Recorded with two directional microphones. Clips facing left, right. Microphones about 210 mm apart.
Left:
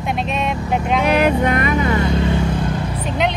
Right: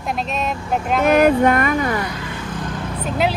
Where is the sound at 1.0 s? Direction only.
45° right (ahead or behind).